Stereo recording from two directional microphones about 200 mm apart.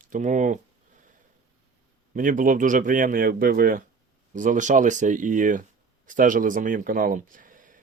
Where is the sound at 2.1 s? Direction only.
40° right (ahead or behind).